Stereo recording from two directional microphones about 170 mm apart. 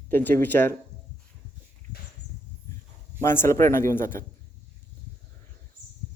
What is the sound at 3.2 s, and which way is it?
A woman's voice, 15° left (ahead or behind).